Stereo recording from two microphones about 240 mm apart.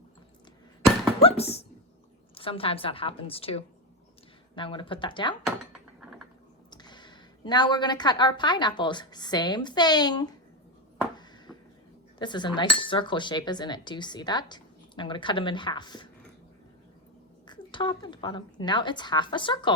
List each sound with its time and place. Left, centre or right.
1.2 s cutlery: left
5.5 s dishes: centre
6.7 s a woman's voice: centre
11.5 s a sound: centre
12.2 s cutlery: centre
17.4 s cutlery: centre